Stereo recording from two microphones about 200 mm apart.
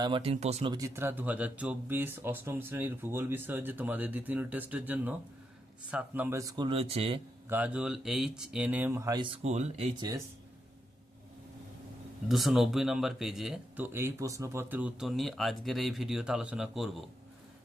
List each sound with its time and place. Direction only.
0.0 s speech: 25° right (ahead or behind)
0.7 s speech: 15° right (ahead or behind)
7.5 s speech: 5° right (ahead or behind); by 10.2 s 20° right (ahead or behind)
12.3 s speech: centre (ahead or behind)